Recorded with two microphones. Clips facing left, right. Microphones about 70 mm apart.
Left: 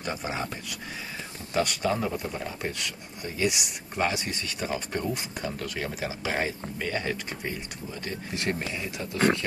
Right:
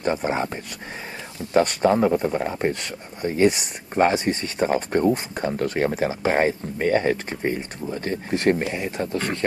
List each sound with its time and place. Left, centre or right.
0.0 s speech: right
1.5 s speech: right